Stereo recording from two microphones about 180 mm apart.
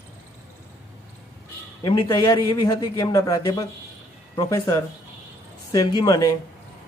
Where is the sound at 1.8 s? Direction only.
25° left (ahead or behind).